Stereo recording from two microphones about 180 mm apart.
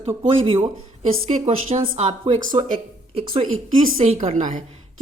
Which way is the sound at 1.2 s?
40° right (ahead or behind).